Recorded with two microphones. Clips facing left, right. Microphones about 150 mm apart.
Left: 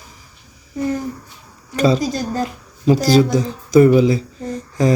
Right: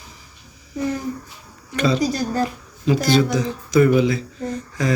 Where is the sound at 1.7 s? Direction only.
40° left (ahead or behind).